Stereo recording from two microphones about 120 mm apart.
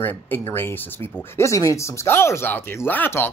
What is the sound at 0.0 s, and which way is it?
Speech, 15° left (ahead or behind).